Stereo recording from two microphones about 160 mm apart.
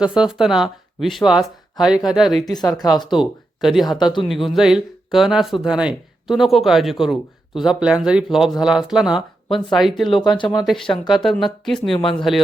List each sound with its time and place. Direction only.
0.0 s speech: 5° right (ahead or behind)
2.4 s speech: 25° left (ahead or behind)
3.2 s speech: centre (ahead or behind)
3.8 s speech: 25° left (ahead or behind)
4.3 s speech: centre (ahead or behind)
10.2 s speech: 30° left (ahead or behind)
11.1 s speech: centre (ahead or behind)